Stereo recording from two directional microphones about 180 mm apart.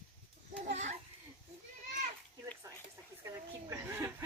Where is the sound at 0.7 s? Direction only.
40° right (ahead or behind).